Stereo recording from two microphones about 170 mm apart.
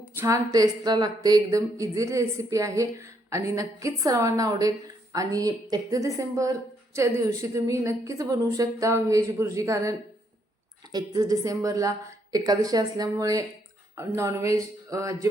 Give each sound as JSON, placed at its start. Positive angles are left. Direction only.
{"t": 0.0, "sound": "a woman's voice", "side_deg": -15}
{"t": 10.9, "sound": "a woman's voice", "side_deg": -20}